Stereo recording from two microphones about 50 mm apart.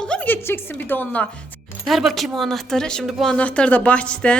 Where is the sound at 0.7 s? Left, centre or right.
Left.